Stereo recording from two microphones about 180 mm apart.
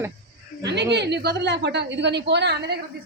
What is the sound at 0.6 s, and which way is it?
A woman's voice, 70° right (ahead or behind).